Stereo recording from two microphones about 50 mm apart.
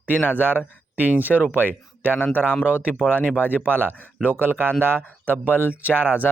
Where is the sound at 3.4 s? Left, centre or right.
Right.